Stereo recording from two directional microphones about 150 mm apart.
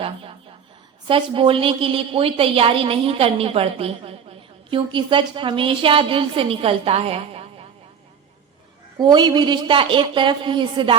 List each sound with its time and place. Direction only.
0.0 s a sound: 40° right (ahead or behind)
1.0 s a woman's voice: 35° right (ahead or behind)
9.0 s a woman's voice: 30° right (ahead or behind)